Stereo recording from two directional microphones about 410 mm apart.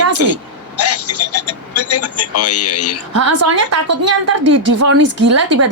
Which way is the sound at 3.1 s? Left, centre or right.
Right.